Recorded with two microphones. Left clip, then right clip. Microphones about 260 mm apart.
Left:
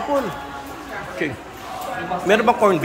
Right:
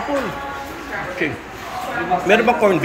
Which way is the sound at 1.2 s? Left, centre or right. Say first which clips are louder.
Right 3 dB; centre.